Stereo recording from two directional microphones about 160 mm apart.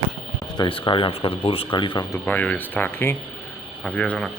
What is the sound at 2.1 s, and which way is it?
Speech, 10° left (ahead or behind).